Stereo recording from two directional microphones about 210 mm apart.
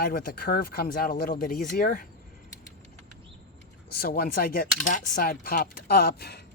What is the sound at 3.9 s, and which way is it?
Speech, 45° left (ahead or behind).